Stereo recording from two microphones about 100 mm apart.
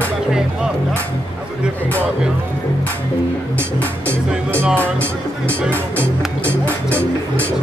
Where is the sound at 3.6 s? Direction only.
15° left (ahead or behind).